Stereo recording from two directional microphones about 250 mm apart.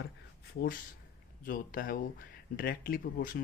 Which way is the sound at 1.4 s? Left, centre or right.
Left.